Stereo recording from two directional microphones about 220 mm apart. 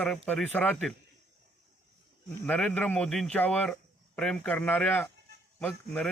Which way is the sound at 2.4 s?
5° left (ahead or behind).